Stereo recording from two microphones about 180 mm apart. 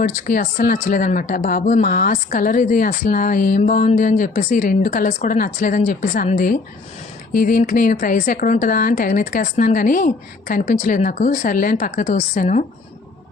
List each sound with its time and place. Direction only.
0.0 s speech: 50° left (ahead or behind)